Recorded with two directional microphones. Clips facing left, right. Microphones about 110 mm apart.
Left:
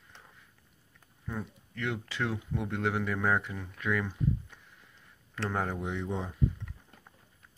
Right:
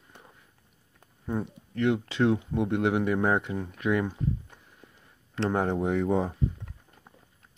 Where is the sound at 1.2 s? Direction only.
25° right (ahead or behind).